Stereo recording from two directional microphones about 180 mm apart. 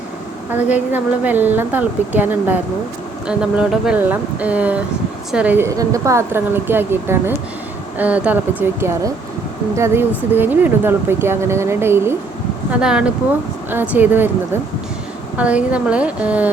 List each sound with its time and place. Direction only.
0.5 s speech: 10° right (ahead or behind)
15.4 s speech: 5° right (ahead or behind)